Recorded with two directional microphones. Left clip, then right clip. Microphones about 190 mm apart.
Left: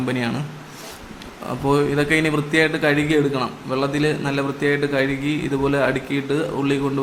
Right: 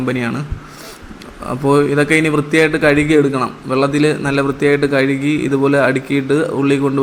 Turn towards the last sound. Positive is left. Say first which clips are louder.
# right 6 dB
turn(degrees=-15)  # may be behind; listen again after turning